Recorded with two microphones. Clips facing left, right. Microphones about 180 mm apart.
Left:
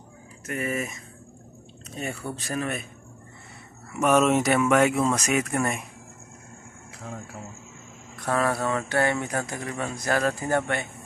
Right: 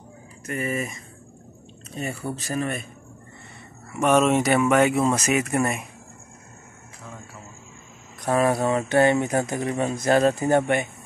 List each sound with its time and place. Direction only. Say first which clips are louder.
0.5 s speech: right 1 dB; centre (ahead or behind)
4.0 s speech: right 1 dB; centre (ahead or behind)
8.2 s speech: right 4 dB; 15° right (ahead or behind)